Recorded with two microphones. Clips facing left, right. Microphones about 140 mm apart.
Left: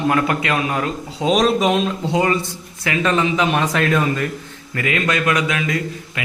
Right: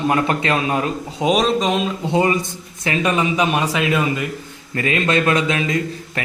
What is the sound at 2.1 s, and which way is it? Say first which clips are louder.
A man's voice: right 2 dB; 20° right (ahead or behind).